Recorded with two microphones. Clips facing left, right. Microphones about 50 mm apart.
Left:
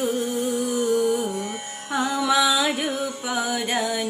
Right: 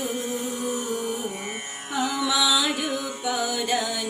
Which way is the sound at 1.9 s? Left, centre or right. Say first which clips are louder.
Left 3 dB; left.